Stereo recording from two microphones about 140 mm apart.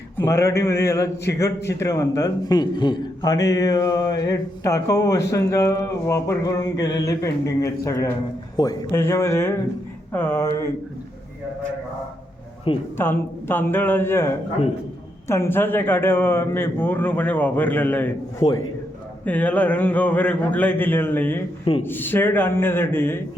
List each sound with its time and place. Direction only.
0.2 s a man's voice: 20° left (ahead or behind)
12.7 s a woman's voice: 40° left (ahead or behind)
13.0 s a man's voice: 15° left (ahead or behind)